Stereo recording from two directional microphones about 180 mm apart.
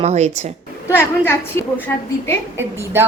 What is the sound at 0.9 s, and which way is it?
Speech, 10° left (ahead or behind).